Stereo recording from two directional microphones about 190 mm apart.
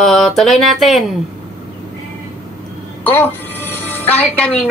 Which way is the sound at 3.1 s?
10° left (ahead or behind).